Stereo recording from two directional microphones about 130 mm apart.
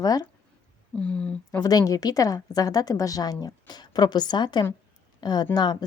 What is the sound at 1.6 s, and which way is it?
A woman's voice, 25° left (ahead or behind).